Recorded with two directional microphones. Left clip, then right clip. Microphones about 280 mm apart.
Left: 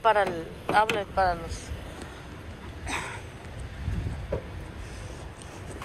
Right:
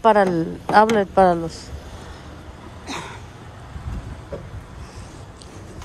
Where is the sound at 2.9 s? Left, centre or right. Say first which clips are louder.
Right 1 dB; centre.